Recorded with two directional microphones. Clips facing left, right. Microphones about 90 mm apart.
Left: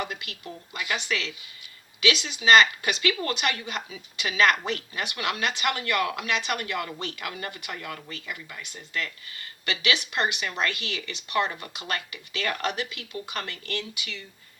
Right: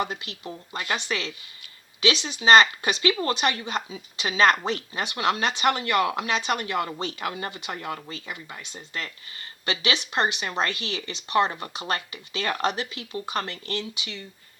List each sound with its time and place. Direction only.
0.0 s speech: 30° right (ahead or behind)